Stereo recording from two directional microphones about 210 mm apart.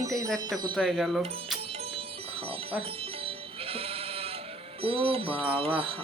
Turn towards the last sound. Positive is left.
turn(degrees=-25)  # may be behind; listen again after turning